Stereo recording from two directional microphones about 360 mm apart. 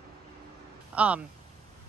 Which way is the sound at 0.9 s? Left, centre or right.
Centre.